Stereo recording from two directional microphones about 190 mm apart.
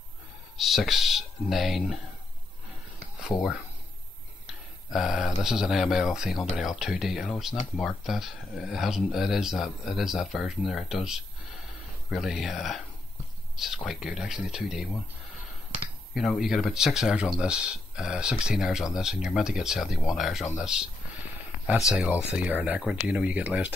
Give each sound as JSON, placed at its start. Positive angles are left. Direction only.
{"t": 0.6, "sound": "speech", "side_deg": 0}
{"t": 3.3, "sound": "speech", "side_deg": 20}
{"t": 4.5, "sound": "speech", "side_deg": 0}
{"t": 12.1, "sound": "speech", "side_deg": 0}
{"t": 16.2, "sound": "speech", "side_deg": 0}